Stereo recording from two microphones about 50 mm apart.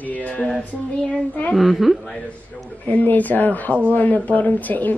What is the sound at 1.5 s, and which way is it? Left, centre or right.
Speech, centre.